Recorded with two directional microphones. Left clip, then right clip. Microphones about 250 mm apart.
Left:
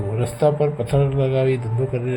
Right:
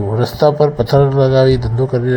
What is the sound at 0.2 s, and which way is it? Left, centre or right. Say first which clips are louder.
Speech: right 7 dB; right.